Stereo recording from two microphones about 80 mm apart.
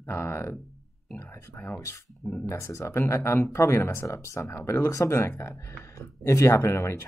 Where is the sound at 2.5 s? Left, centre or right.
Left.